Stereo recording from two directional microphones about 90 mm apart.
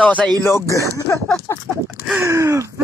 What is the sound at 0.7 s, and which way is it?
Speech, 35° left (ahead or behind).